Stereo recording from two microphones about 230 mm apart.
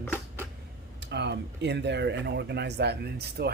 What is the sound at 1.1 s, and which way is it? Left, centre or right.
Speech, right.